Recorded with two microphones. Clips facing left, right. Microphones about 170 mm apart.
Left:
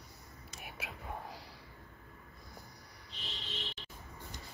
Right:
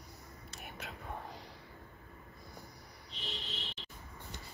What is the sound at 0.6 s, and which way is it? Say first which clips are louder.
Whispering: even; 5° left (ahead or behind).